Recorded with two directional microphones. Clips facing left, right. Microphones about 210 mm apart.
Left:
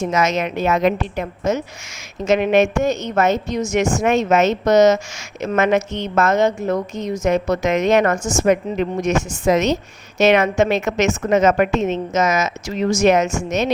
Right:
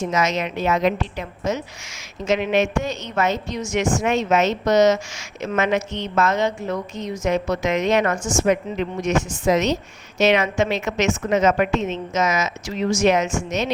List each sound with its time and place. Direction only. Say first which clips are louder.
0.1 s a woman's voice: left 3 dB; 50° left (ahead or behind)